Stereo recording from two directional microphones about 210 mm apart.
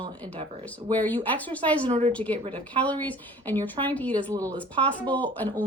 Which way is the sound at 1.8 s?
30° right (ahead or behind).